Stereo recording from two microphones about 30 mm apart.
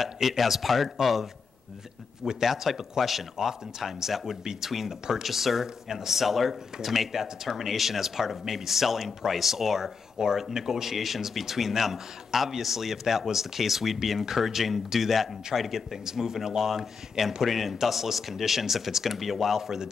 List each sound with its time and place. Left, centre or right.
0.0 s speech: centre
2.4 s speech: centre
10.1 s speech: centre
15.9 s speech: centre